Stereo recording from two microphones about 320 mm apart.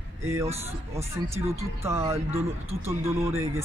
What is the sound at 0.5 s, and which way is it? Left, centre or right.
Speech, centre.